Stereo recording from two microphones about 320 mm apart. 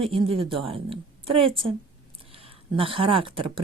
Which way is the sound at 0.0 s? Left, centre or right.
Centre.